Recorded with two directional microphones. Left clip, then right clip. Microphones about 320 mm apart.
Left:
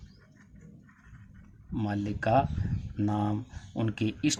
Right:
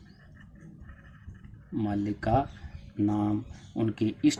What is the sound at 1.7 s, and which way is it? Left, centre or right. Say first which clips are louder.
Speech: right 3 dB; left.